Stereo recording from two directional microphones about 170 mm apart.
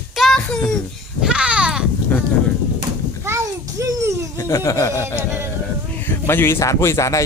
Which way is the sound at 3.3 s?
15° right (ahead or behind).